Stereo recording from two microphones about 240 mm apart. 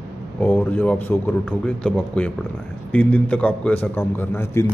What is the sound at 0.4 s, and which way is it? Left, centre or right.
Speech, centre.